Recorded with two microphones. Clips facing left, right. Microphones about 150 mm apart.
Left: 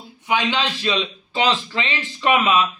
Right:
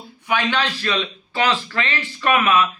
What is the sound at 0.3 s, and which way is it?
A man's voice, 15° left (ahead or behind).